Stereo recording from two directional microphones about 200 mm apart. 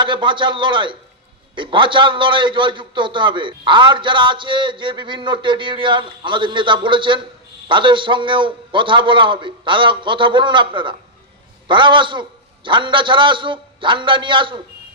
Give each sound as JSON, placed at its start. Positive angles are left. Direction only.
{"t": 0.0, "sound": "a man's voice", "side_deg": -25}